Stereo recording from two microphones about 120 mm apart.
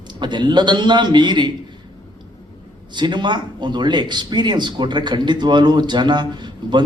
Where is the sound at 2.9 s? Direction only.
40° right (ahead or behind).